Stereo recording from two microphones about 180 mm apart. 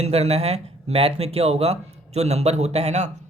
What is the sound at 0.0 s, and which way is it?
Speech, 35° right (ahead or behind).